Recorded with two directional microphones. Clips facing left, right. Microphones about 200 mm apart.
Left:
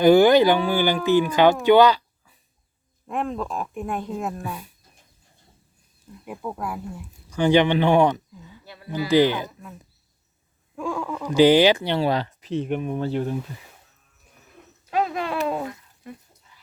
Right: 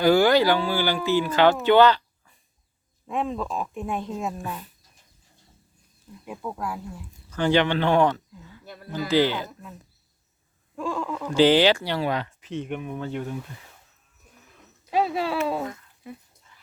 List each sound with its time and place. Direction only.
0.0 s speech: 20° left (ahead or behind)
3.1 s speech: centre (ahead or behind)
6.2 s speech: 5° left (ahead or behind)
8.6 s a sound: 50° right (ahead or behind)
9.0 s speech: 15° left (ahead or behind)
11.0 s speech: 10° left (ahead or behind); by 13.3 s 30° left (ahead or behind)
14.8 s speech: 10° right (ahead or behind)